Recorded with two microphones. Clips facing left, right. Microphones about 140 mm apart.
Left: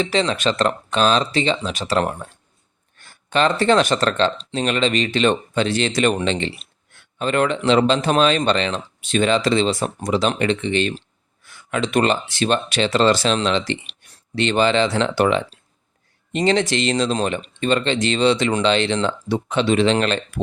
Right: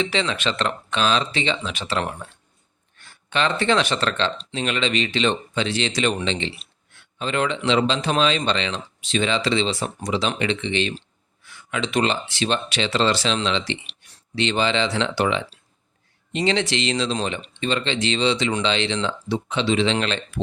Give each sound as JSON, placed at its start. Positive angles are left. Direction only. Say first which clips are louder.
{"t": 0.0, "sound": "speech", "louder": "left 4 dB", "side_deg": 40}